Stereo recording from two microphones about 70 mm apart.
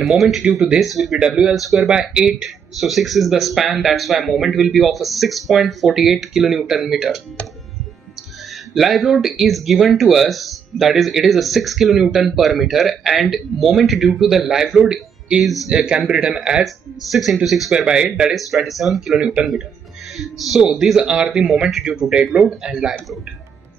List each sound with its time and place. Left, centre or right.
0.0 s speech: centre
8.7 s speech: centre
18.3 s speech: centre
19.1 s speech: centre
20.2 s speech: centre